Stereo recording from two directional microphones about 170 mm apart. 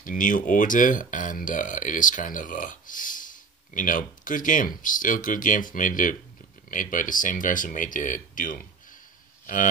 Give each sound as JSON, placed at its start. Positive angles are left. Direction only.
{"t": 0.0, "sound": "speech", "side_deg": 50}